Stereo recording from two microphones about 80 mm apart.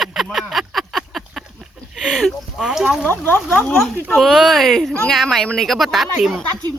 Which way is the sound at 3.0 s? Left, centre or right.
Left.